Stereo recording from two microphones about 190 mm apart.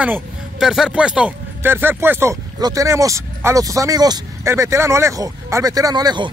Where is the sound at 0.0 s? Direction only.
5° right (ahead or behind).